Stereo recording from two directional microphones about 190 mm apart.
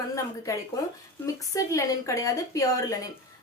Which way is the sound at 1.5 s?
20° left (ahead or behind).